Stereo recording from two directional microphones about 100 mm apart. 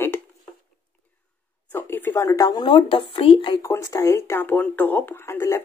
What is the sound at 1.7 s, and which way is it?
Speech, 20° left (ahead or behind).